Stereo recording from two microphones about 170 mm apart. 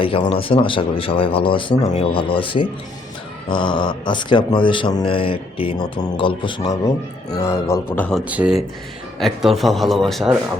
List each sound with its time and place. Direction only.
0.0 s speech: 30° left (ahead or behind); by 8.2 s 10° left (ahead or behind)
8.2 s speech: 10° right (ahead or behind)